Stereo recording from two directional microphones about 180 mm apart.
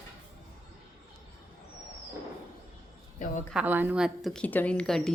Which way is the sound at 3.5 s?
5° right (ahead or behind).